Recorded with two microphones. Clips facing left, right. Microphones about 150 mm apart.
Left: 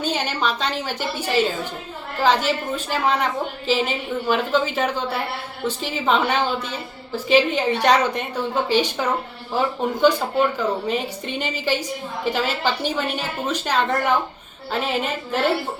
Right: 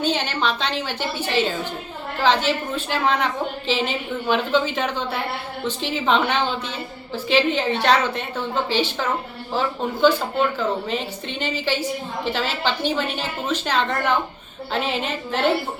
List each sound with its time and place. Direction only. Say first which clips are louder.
0.0 s a woman's voice: right 1 dB; 10° left (ahead or behind)